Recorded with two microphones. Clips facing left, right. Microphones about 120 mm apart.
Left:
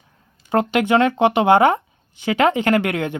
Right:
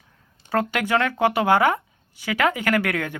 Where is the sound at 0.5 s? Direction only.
20° left (ahead or behind).